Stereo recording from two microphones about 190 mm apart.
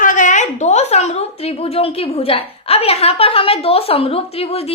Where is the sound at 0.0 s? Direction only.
40° left (ahead or behind).